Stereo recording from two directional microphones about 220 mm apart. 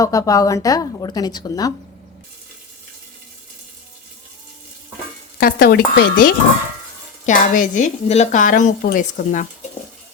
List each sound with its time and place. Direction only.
0.0 s a woman's voice: 15° left (ahead or behind)
5.4 s a woman's voice: 45° left (ahead or behind)